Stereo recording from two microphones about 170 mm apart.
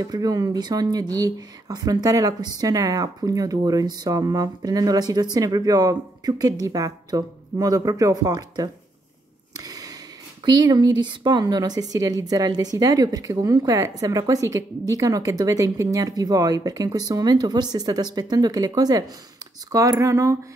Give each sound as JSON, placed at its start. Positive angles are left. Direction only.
{"t": 0.0, "sound": "speech", "side_deg": -25}
{"t": 9.6, "sound": "a sound", "side_deg": -20}
{"t": 10.4, "sound": "speech", "side_deg": -25}